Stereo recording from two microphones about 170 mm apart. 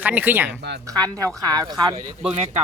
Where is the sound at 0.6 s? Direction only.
80° right.